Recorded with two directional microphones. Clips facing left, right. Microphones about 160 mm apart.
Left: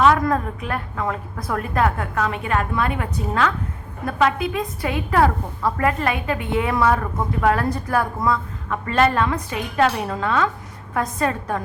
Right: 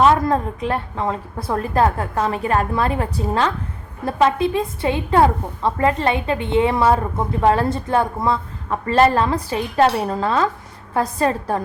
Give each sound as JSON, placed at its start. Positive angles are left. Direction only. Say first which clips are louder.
{"t": 0.0, "sound": "a woman's voice", "louder": "right 2 dB", "side_deg": -30}